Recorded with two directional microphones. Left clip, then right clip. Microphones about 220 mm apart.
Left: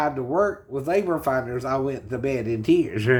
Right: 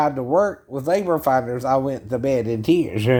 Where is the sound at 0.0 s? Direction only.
50° right (ahead or behind).